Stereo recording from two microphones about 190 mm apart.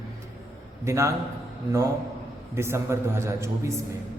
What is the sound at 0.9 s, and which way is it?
Speech, 15° right (ahead or behind).